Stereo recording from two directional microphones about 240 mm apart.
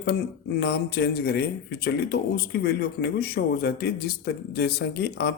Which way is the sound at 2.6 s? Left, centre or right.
Left.